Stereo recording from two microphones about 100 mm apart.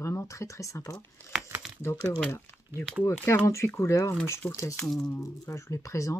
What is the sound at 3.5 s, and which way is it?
Speech, 30° left (ahead or behind).